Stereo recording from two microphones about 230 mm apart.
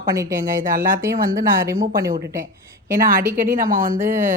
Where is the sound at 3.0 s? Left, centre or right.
Right.